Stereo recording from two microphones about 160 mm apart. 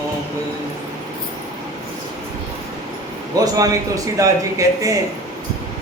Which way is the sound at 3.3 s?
20° right (ahead or behind).